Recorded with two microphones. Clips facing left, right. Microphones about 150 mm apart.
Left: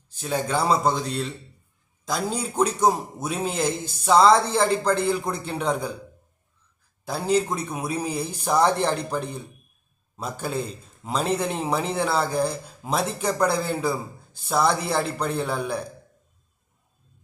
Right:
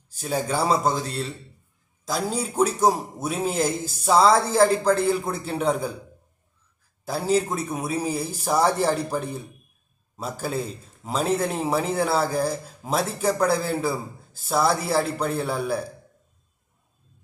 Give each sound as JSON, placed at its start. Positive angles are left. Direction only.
{"t": 0.1, "sound": "a man's voice", "side_deg": -10}
{"t": 2.3, "sound": "a man's voice", "side_deg": -5}
{"t": 7.1, "sound": "a man's voice", "side_deg": -5}